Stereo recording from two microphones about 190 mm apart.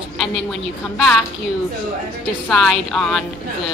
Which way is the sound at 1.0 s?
Centre (ahead or behind).